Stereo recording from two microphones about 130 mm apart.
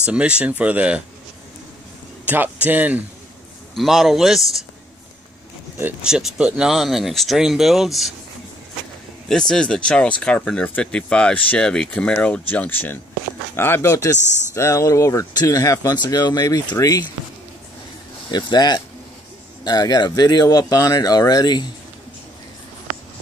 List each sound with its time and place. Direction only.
0.0 s speech: 10° right (ahead or behind)
2.2 s a man's voice: 15° right (ahead or behind)
3.7 s speech: centre (ahead or behind)
6.0 s speech: 5° right (ahead or behind)
9.3 s speech: 5° left (ahead or behind); by 17.1 s 25° left (ahead or behind)
18.3 s speech: 35° left (ahead or behind)